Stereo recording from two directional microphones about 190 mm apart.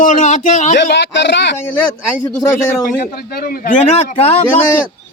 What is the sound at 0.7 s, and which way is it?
Speech, 65° left (ahead or behind).